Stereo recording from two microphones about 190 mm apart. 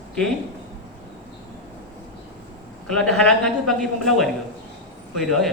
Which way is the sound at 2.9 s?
5° left (ahead or behind).